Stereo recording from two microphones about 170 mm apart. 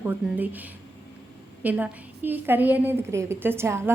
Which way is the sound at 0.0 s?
10° right (ahead or behind).